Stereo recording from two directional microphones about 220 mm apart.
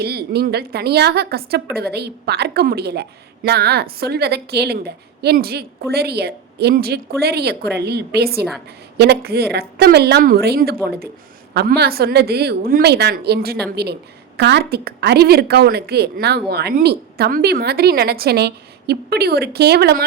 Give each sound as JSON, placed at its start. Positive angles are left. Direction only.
{"t": 0.0, "sound": "a woman's voice", "side_deg": -45}